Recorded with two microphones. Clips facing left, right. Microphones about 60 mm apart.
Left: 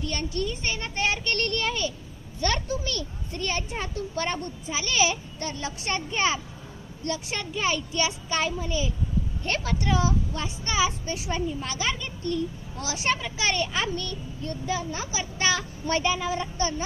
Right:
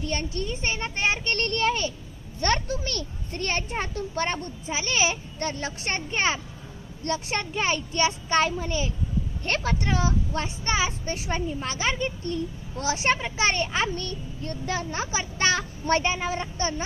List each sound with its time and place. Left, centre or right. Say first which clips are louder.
0.0 s a child's voice: even; right
5.4 s a child's voice: right 2 dB; right